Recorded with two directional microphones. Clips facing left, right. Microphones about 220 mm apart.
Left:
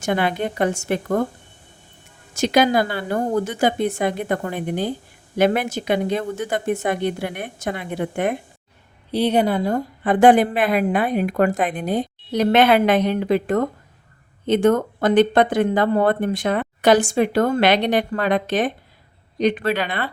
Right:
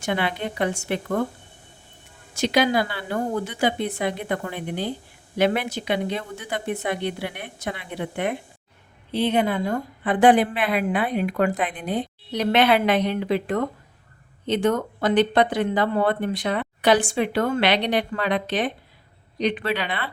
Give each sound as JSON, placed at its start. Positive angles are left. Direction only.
{"t": 0.0, "sound": "a woman's voice", "side_deg": 45}
{"t": 2.3, "sound": "a woman's voice", "side_deg": 45}